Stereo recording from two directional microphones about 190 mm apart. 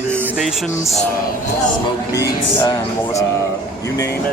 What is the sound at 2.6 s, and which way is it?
Speech, 20° left (ahead or behind).